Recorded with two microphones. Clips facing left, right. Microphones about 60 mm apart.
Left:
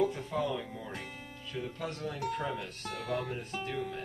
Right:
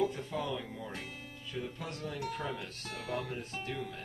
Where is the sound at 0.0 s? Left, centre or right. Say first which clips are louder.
Left 3 dB; centre.